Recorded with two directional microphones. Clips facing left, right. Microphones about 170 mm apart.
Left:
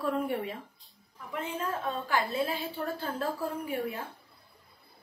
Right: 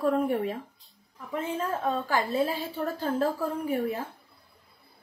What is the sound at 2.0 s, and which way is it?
Speech, 40° right (ahead or behind).